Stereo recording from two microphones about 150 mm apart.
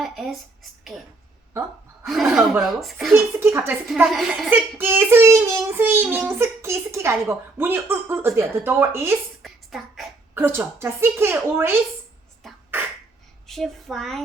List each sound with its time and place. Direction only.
0.0 s a sound: centre (ahead or behind)
2.0 s speech: centre (ahead or behind)
3.1 s speech: 15° right (ahead or behind)
4.0 s speech: centre (ahead or behind)
4.4 s speech: 15° right (ahead or behind)
9.4 s a sound: centre (ahead or behind)
10.3 s speech: 15° right (ahead or behind)
12.4 s beatboxing: centre (ahead or behind)
13.5 s speech: centre (ahead or behind)